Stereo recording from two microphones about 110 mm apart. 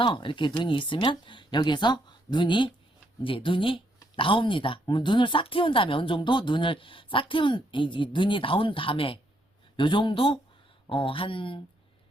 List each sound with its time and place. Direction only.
0.0 s speech: 50° left (ahead or behind)